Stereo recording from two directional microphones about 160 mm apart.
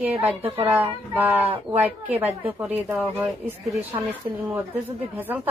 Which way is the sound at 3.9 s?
25° right (ahead or behind).